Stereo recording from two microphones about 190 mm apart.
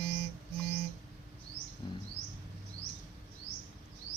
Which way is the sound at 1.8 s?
25° left (ahead or behind).